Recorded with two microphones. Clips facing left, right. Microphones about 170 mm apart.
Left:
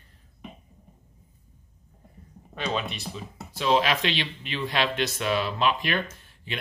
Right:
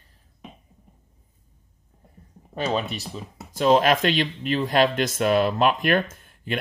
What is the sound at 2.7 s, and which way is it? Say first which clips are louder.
Speech: right 4 dB; 40° right (ahead or behind).